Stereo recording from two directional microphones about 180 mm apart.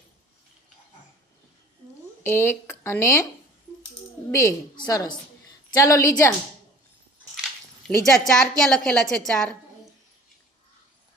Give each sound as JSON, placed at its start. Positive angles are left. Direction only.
{"t": 2.2, "sound": "speech", "side_deg": 15}
{"t": 4.3, "sound": "a woman's voice", "side_deg": 20}
{"t": 7.9, "sound": "a woman's voice", "side_deg": 5}